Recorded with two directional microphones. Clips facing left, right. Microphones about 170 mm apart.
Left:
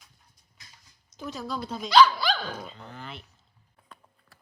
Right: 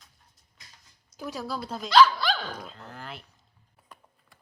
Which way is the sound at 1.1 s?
10° right (ahead or behind).